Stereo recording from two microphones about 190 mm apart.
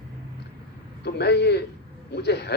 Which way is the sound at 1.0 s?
60° left (ahead or behind).